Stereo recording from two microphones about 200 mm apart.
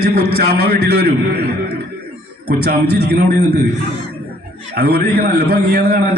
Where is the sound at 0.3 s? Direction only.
50° right (ahead or behind).